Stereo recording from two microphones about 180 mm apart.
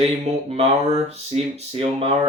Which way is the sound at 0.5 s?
35° right (ahead or behind).